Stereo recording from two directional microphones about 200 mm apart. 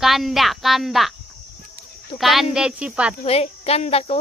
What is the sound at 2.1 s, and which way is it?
Speech, centre (ahead or behind).